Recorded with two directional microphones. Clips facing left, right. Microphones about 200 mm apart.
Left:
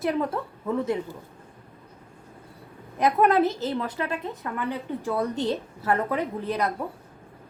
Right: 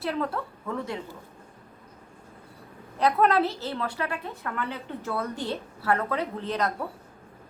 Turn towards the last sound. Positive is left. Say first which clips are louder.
# left 2 dB
turn(degrees=10)  # may be behind; listen again after turning